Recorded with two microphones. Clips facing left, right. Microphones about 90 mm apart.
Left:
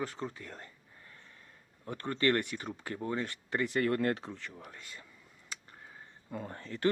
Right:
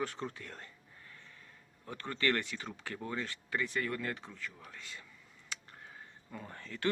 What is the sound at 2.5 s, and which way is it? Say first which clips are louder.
Speech: left 3 dB; 20° left (ahead or behind).